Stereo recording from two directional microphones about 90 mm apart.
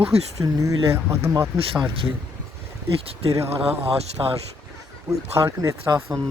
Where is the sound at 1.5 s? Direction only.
90° right.